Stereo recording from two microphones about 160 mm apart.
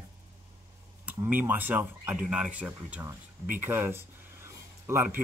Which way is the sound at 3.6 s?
10° right (ahead or behind).